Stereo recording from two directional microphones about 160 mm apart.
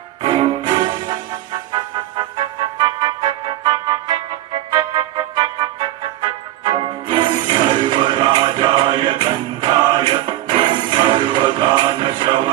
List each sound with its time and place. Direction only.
0.2 s music: 30° right (ahead or behind)